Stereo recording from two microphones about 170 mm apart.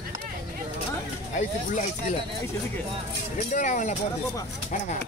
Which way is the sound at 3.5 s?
45° left (ahead or behind).